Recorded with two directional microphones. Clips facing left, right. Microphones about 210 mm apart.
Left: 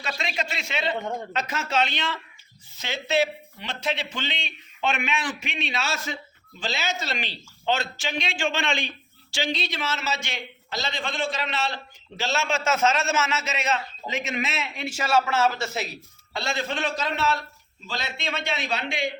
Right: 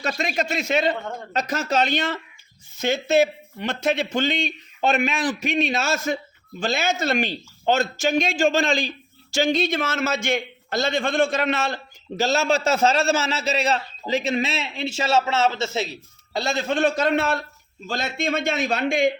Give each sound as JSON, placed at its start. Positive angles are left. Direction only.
{"t": 0.0, "sound": "a man's voice", "side_deg": -45}
{"t": 16.3, "sound": "a man's voice", "side_deg": -40}